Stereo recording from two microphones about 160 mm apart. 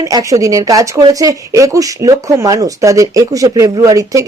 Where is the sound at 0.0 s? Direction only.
20° right (ahead or behind).